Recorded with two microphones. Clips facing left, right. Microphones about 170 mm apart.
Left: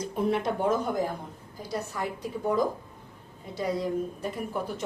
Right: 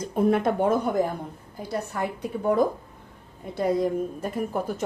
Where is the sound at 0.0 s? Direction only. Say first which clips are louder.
Right 5 dB; 50° right (ahead or behind).